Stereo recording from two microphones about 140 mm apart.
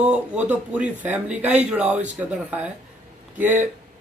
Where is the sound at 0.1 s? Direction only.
10° right (ahead or behind).